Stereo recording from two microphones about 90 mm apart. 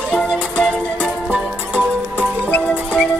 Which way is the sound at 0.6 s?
10° left (ahead or behind).